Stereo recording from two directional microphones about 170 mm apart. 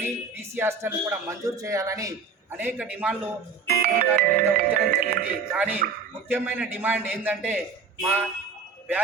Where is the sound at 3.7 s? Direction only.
65° right (ahead or behind).